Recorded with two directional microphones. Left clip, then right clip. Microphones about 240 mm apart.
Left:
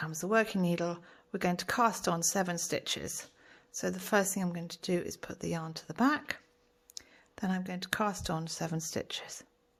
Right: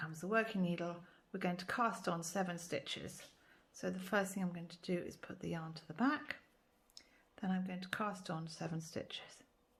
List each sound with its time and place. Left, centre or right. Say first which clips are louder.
0.0 s speech: left 7 dB; left